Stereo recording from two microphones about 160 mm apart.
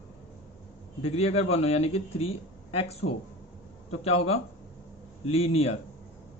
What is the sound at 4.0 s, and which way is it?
A man's voice, 40° left (ahead or behind).